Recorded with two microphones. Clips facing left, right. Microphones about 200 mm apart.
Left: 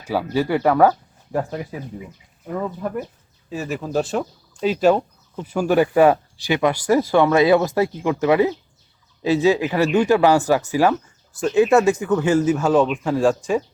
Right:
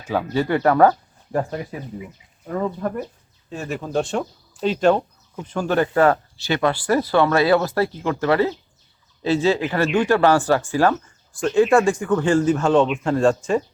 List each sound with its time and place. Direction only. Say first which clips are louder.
0.1 s speech: even; 10° left (ahead or behind)